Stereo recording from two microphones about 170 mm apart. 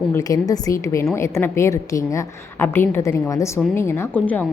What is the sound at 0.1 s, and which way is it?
A woman's voice, 20° left (ahead or behind).